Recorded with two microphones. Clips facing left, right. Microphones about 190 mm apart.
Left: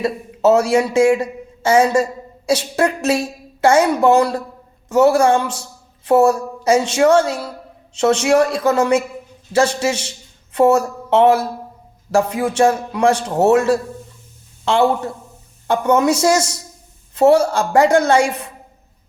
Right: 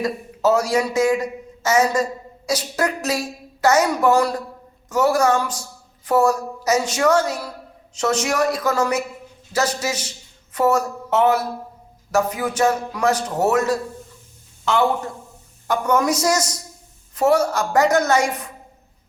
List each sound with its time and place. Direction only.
0.0 s a man's voice: 25° left (ahead or behind)
14.6 s a sound: 30° left (ahead or behind)
15.6 s a woman's voice: 25° left (ahead or behind)